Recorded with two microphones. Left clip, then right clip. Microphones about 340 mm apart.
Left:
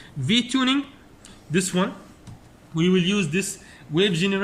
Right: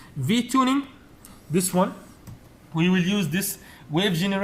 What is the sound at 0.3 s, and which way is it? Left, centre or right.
A man's voice, centre.